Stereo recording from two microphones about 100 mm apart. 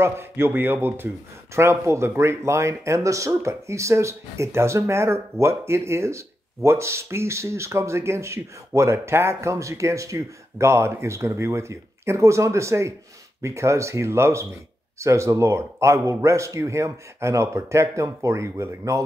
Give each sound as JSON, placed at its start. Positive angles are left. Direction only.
{"t": 0.0, "sound": "speech", "side_deg": -25}